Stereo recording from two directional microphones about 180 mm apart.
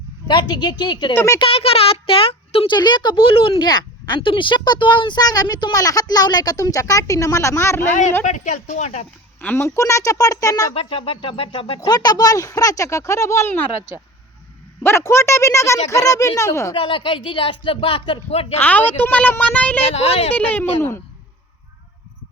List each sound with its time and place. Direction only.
0.3 s speech: 25° left (ahead or behind)
1.1 s speech: 15° left (ahead or behind)
1.4 s speech: 30° left (ahead or behind); by 7.8 s 15° left (ahead or behind)
7.8 s a woman's voice: 40° left (ahead or behind)
9.4 s speech: 10° left (ahead or behind)
10.8 s speech: 30° left (ahead or behind)
16.7 s speech: 30° left (ahead or behind)
18.6 s speech: 10° left (ahead or behind)
19.9 s a woman's voice: 35° left (ahead or behind)
20.3 s speech: 10° left (ahead or behind)